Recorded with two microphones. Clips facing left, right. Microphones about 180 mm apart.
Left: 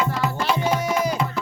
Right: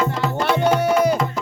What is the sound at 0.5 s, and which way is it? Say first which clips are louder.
Music: right 5 dB; 60° right (ahead or behind).